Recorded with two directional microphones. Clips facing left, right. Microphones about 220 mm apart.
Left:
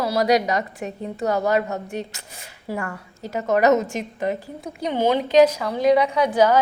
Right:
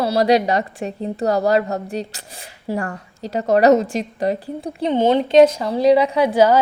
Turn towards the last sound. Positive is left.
turn(degrees=-30)  # may be behind; listen again after turning